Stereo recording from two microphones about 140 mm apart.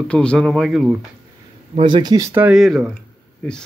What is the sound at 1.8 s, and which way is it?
Speech, 35° right (ahead or behind).